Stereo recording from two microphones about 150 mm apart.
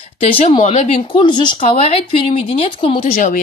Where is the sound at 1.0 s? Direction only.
30° left (ahead or behind).